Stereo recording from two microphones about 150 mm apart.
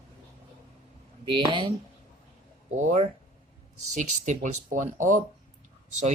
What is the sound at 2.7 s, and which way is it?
Speech, 50° right (ahead or behind).